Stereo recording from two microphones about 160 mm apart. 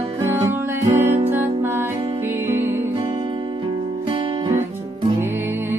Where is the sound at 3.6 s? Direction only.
30° right (ahead or behind).